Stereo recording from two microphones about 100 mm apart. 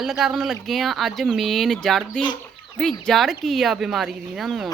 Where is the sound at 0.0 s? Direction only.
Centre (ahead or behind).